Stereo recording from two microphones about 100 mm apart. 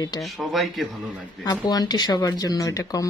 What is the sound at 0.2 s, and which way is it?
Speech, centre (ahead or behind).